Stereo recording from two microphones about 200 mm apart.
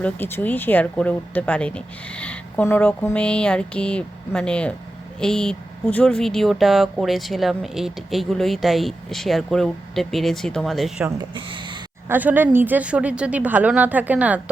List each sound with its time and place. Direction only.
0.0 s speech: 10° left (ahead or behind)
11.2 s speech: 25° right (ahead or behind)
12.0 s speech: 10° right (ahead or behind)